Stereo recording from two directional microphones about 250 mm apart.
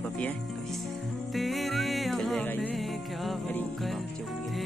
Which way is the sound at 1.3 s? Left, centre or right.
Centre.